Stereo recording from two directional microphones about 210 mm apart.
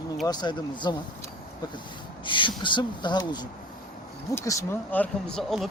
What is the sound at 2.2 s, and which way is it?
Speech, 25° left (ahead or behind).